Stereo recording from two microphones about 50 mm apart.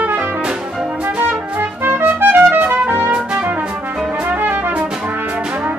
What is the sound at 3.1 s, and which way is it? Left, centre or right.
Music, right.